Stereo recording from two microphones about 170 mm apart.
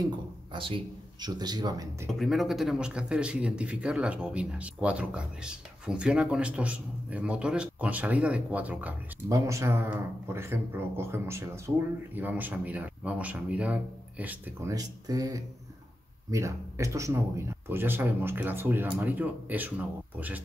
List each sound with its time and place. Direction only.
0.0 s speech: 30° right (ahead or behind)
2.0 s speech: centre (ahead or behind)
14.7 s speech: 20° right (ahead or behind)